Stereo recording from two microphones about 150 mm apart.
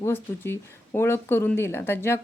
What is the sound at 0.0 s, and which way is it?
Speech, 15° left (ahead or behind).